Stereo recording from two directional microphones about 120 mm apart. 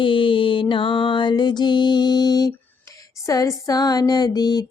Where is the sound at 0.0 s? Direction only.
45° left (ahead or behind).